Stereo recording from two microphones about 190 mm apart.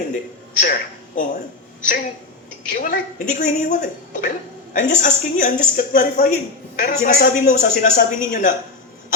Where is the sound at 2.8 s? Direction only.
45° left (ahead or behind).